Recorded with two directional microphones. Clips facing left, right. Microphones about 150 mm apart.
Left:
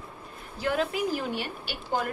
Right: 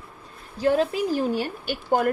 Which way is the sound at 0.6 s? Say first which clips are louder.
Right 6 dB; 30° right (ahead or behind).